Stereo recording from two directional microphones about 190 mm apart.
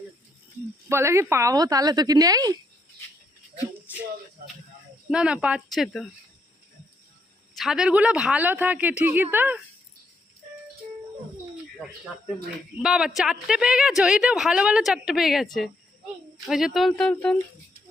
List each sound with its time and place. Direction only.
0.9 s speech: 15° right (ahead or behind)
5.0 s a woman's voice: 5° right (ahead or behind)
7.5 s speech: centre (ahead or behind)
12.8 s a woman's voice: 5° right (ahead or behind)
16.5 s a woman's voice: centre (ahead or behind)